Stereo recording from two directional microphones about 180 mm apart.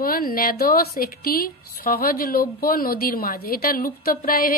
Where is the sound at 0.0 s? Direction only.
55° left (ahead or behind).